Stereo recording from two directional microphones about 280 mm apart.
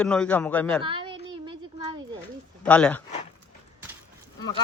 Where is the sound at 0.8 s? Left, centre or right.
Centre.